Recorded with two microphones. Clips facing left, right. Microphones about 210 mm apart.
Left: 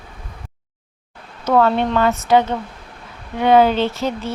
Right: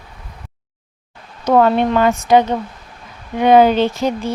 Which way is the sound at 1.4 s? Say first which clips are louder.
Right 3 dB; 15° right (ahead or behind).